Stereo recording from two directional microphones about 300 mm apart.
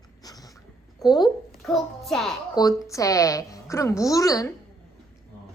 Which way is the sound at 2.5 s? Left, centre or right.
Centre.